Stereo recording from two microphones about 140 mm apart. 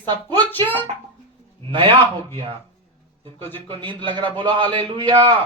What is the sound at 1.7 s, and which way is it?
Speech, 35° right (ahead or behind).